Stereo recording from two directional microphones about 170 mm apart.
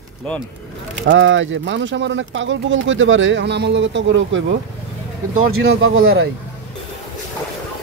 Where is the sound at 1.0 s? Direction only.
90° right.